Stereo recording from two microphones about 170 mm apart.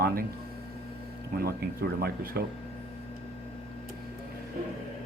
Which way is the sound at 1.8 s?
65° right (ahead or behind).